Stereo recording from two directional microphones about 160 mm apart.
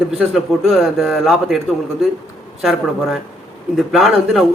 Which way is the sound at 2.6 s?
Centre (ahead or behind).